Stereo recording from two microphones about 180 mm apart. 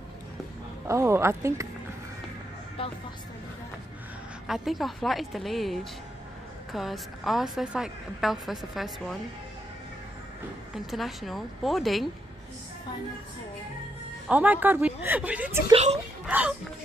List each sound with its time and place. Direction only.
0.8 s a woman's voice: 15° right (ahead or behind)
2.8 s speech: 30° left (ahead or behind)
4.5 s a woman's voice: centre (ahead or behind)
10.7 s a woman's voice: centre (ahead or behind)
14.3 s a woman's voice: 10° right (ahead or behind)
15.7 s speech: 35° right (ahead or behind)
16.3 s speech: 10° right (ahead or behind)